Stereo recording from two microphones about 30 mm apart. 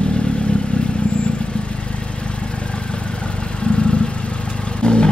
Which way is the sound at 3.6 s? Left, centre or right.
Left.